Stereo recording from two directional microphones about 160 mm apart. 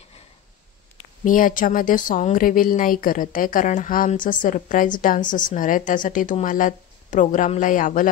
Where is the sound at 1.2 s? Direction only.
60° left (ahead or behind).